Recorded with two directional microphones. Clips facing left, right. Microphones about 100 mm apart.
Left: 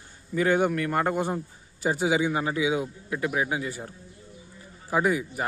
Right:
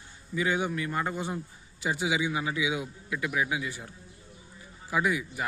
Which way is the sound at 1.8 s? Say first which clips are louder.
Left 5 dB; 40° left (ahead or behind).